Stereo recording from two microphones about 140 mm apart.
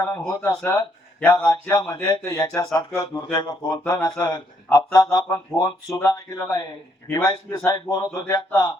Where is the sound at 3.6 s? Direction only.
15° left (ahead or behind).